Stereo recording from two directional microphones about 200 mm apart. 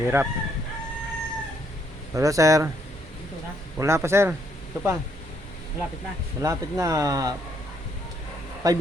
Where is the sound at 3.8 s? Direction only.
15° right (ahead or behind).